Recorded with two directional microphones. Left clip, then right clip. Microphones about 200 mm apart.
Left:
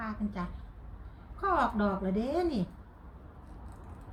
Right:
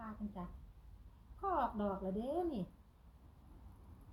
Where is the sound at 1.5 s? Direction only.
5° left (ahead or behind).